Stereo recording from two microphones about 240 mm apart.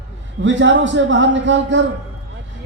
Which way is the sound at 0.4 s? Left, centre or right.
Right.